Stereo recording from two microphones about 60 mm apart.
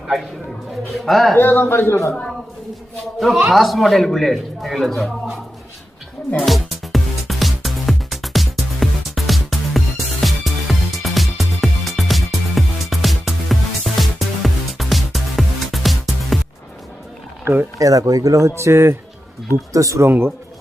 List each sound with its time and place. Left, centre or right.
0.9 s a man's voice: centre
1.4 s speech: left
3.2 s a man's voice: centre
6.4 s music: centre
17.4 s speech: right
17.7 s speech: right
19.7 s speech: right
20.1 s speech: right